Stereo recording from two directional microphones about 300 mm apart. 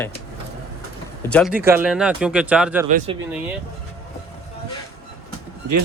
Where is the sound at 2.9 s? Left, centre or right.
Right.